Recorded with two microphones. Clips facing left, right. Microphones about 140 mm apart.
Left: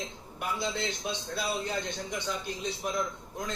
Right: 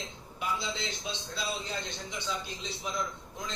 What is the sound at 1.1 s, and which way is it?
A man's voice, 55° left (ahead or behind).